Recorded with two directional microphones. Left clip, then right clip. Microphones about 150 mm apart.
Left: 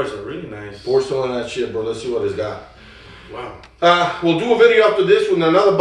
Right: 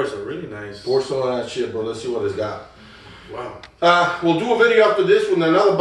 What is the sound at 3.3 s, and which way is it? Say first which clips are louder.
Speech: even; 5° left (ahead or behind).